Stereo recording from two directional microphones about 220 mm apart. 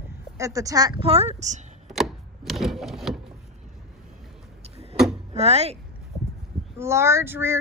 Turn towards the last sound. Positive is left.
turn(degrees=-10)  # may be behind; listen again after turning